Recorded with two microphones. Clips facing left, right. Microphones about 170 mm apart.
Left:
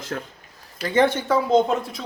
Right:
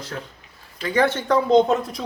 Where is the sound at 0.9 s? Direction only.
15° left (ahead or behind).